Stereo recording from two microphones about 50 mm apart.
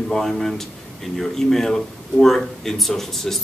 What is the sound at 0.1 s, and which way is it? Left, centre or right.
Speech, centre.